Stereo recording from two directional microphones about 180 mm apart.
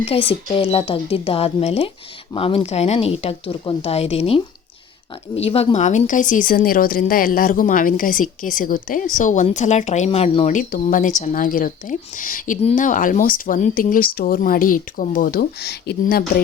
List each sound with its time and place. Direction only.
0.0 s speech: 30° left (ahead or behind); by 16.2 s 60° left (ahead or behind)